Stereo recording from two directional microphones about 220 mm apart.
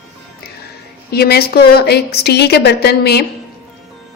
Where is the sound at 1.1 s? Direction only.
45° left (ahead or behind).